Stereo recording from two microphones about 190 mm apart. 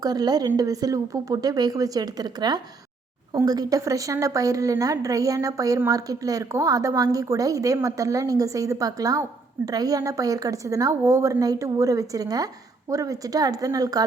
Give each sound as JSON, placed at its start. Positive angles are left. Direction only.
{"t": 0.0, "sound": "a woman's voice", "side_deg": -20}